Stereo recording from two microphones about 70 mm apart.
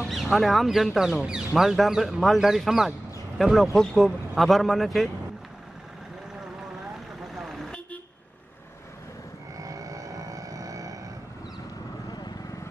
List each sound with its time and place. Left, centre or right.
0.0 s speech: centre
7.3 s vehicle: centre
9.6 s vehicle: right